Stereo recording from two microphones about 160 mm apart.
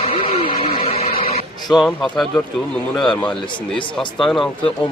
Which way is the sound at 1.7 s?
5° left (ahead or behind).